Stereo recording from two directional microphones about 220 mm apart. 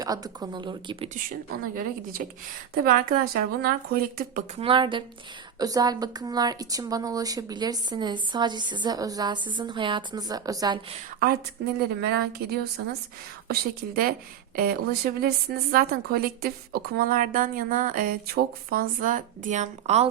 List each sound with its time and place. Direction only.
0.0 s a woman's voice: 15° right (ahead or behind)
1.7 s a woman's voice: 40° right (ahead or behind)
4.6 s a woman's voice: 20° right (ahead or behind)
12.0 s a woman's voice: 45° right (ahead or behind); by 20.1 s 30° right (ahead or behind)